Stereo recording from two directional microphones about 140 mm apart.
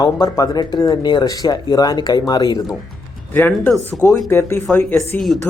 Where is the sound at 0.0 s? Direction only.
25° left (ahead or behind).